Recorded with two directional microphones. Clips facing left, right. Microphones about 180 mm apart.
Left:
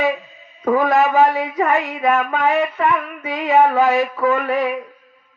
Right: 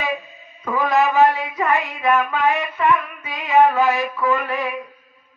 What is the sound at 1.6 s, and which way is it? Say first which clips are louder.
Female singing: left 3 dB; 45° left (ahead or behind).